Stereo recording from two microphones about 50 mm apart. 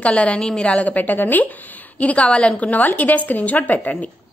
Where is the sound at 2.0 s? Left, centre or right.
Left.